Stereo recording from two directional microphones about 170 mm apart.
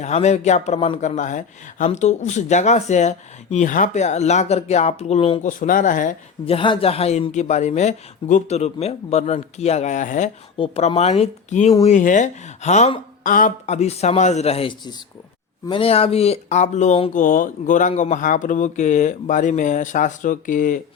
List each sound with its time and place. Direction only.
0.0 s speech: 40° left (ahead or behind)
5.4 s speech: 50° left (ahead or behind)
6.4 s speech: 30° left (ahead or behind); by 20.8 s 50° left (ahead or behind)